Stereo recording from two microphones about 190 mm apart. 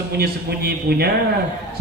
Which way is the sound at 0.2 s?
55° right (ahead or behind).